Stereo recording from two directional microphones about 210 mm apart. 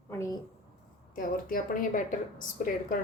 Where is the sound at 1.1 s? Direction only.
40° left (ahead or behind).